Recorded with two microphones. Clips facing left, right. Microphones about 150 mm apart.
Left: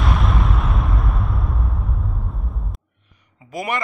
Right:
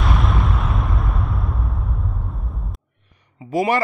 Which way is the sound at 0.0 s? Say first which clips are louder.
Even; centre (ahead or behind).